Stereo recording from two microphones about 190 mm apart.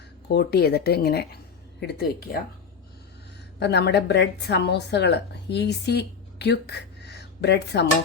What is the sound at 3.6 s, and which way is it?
Speech, 65° left (ahead or behind).